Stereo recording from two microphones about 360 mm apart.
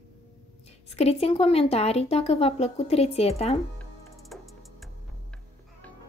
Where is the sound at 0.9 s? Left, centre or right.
Centre.